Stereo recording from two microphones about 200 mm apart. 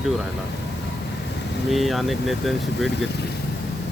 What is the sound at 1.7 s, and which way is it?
Speech, centre (ahead or behind).